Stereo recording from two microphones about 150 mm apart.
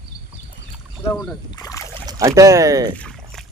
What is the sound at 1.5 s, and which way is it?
Rowboat, 25° left (ahead or behind).